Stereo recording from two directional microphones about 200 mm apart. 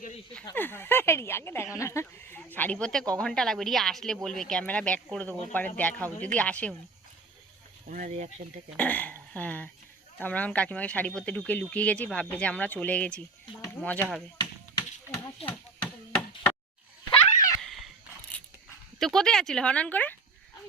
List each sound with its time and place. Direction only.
0.4 s speech: 10° left (ahead or behind)
7.9 s speech: 40° right (ahead or behind)
8.8 s speech: 5° left (ahead or behind)
14.3 s a sound: 20° left (ahead or behind)
15.4 s knock: 5° left (ahead or behind)
17.6 s horse: centre (ahead or behind)
18.9 s speech: centre (ahead or behind)